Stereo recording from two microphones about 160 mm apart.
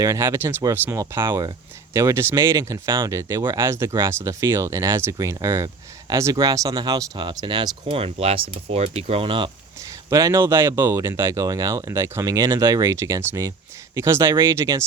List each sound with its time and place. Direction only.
0.0 s speech: 20° right (ahead or behind)
10.1 s speech: 20° right (ahead or behind)